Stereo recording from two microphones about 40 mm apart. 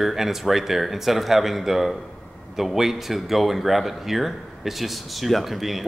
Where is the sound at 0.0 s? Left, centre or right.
Centre.